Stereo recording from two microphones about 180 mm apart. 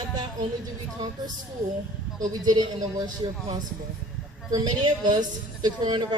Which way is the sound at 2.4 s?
20° right (ahead or behind).